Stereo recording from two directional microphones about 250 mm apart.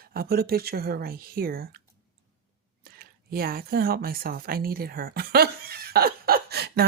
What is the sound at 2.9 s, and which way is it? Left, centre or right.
Speech, right.